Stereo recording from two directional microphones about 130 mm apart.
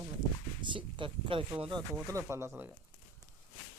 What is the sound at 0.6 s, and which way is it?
Speech, 40° right (ahead or behind).